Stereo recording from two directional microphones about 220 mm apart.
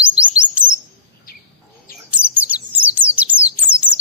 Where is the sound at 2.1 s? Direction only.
5° right (ahead or behind).